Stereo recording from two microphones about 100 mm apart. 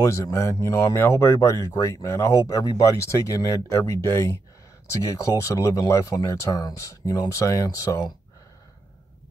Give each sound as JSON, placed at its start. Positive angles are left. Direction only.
{"t": 0.0, "sound": "speech", "side_deg": 30}